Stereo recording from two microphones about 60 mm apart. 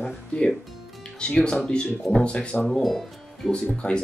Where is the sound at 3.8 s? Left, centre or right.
Centre.